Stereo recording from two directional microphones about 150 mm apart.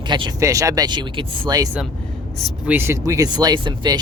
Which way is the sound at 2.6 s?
15° right (ahead or behind).